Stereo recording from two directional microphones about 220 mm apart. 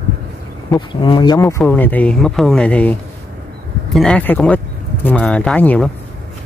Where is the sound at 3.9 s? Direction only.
5° left (ahead or behind).